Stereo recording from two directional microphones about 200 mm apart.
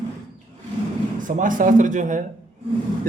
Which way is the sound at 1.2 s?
40° right (ahead or behind).